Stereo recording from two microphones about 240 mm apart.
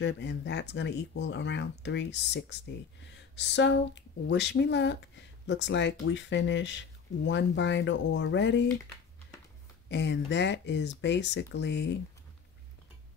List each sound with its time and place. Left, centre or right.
0.0 s speech: left
9.8 s speech: left